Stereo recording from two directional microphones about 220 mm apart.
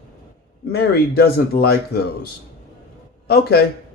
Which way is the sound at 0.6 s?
45° left (ahead or behind).